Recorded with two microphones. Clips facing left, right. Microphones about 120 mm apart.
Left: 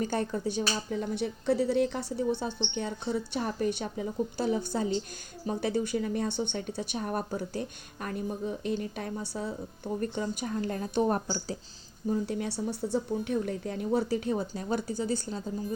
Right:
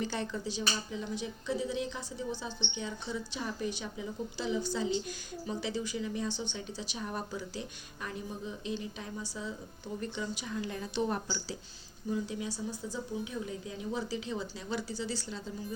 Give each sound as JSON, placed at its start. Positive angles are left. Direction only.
{"t": 0.0, "sound": "speech", "side_deg": 50}
{"t": 12.2, "sound": "speech", "side_deg": 55}